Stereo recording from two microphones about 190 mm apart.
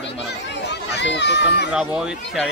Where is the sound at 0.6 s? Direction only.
65° left (ahead or behind).